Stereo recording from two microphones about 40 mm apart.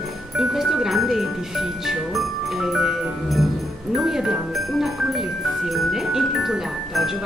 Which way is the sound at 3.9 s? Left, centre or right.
Centre.